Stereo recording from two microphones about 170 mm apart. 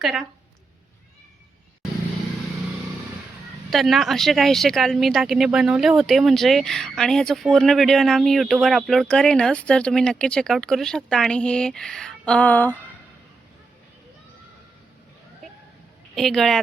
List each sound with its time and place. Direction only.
0.0 s speech: centre (ahead or behind)
3.7 s speech: centre (ahead or behind)
16.1 s speech: centre (ahead or behind)